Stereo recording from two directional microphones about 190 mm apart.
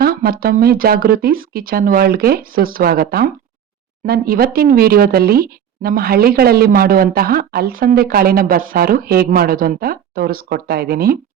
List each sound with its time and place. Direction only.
0.0 s speech: 55° right (ahead or behind)